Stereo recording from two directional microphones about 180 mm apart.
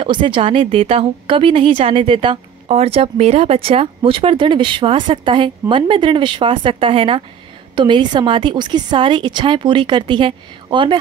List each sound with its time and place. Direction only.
0.0 s a woman's voice: 25° right (ahead or behind)